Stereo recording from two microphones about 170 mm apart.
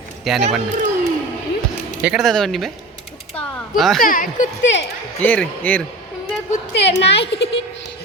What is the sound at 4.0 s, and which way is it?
Speech, 55° left (ahead or behind).